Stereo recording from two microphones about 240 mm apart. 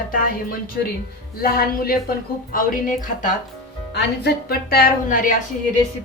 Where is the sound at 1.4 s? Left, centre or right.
Left.